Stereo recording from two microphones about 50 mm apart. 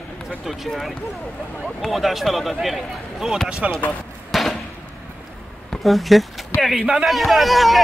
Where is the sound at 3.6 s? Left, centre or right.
Right.